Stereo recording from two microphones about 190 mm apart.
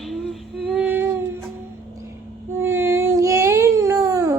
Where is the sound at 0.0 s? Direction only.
Centre (ahead or behind).